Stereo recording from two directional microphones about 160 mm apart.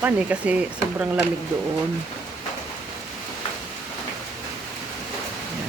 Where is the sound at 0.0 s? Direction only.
10° right (ahead or behind).